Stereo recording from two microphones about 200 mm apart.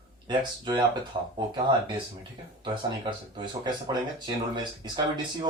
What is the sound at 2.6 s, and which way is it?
Speech, 25° right (ahead or behind).